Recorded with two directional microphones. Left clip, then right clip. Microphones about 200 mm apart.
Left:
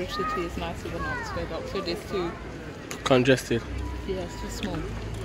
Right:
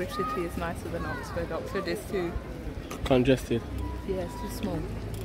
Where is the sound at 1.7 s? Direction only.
30° right (ahead or behind).